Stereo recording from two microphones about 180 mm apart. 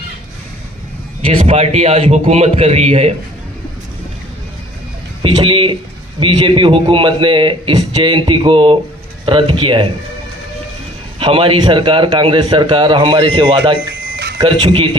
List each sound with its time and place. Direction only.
1.4 s a man's voice: 35° right (ahead or behind)
5.2 s a man's voice: 30° right (ahead or behind)
11.2 s a man's voice: 30° right (ahead or behind)